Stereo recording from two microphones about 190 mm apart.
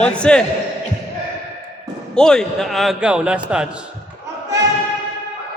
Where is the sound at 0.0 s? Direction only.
5° left (ahead or behind).